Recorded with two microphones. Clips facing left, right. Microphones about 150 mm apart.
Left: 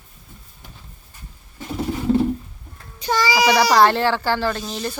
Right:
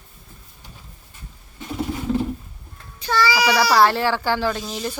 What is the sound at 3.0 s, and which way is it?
Speech, 15° left (ahead or behind).